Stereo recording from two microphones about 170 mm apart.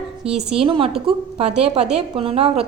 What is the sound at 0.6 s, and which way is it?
A woman's voice, 30° right (ahead or behind).